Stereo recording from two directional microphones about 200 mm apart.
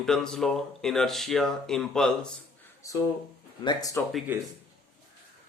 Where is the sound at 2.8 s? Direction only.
15° left (ahead or behind).